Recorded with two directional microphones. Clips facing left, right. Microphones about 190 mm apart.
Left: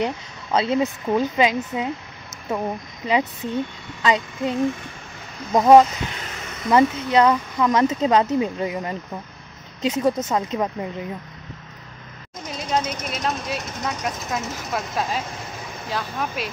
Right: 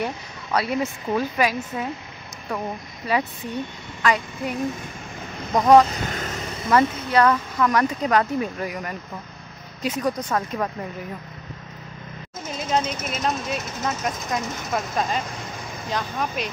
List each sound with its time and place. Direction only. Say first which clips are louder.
0.0 s speech: left 3 dB; 20° left (ahead or behind)
4.0 s speech: left 2 dB; 20° left (ahead or behind)
5.9 s vehicle: right 2 dB; 45° right (ahead or behind)
6.7 s speech: left 2 dB; 20° left (ahead or behind)
12.4 s speech: even; centre (ahead or behind)